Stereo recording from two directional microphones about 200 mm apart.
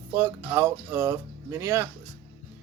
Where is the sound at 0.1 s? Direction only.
10° right (ahead or behind).